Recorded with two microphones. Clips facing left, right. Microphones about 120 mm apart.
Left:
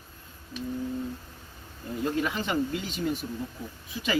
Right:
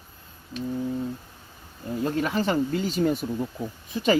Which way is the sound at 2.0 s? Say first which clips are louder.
Right 4 dB; 40° right (ahead or behind).